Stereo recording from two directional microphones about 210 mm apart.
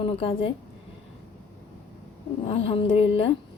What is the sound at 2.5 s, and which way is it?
Speech, 25° left (ahead or behind).